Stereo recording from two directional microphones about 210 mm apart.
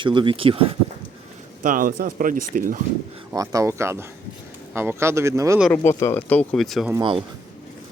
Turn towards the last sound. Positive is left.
turn(degrees=-25)  # may be behind; listen again after turning